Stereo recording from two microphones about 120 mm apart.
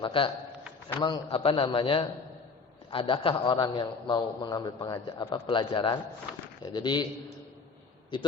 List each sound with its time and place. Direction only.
0.0 s a man's voice: 45° left (ahead or behind)
8.1 s a man's voice: 40° left (ahead or behind)